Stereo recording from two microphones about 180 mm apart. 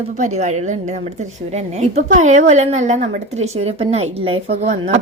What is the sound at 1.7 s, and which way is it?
A woman's voice, 40° right (ahead or behind).